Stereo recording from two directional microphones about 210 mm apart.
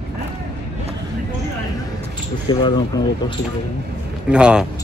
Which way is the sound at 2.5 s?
20° left (ahead or behind).